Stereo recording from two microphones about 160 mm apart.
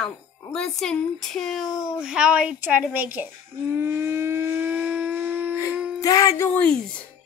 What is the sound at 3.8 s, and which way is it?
Civil defense siren, 15° right (ahead or behind).